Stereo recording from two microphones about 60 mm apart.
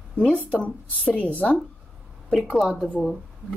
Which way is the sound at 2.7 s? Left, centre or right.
Centre.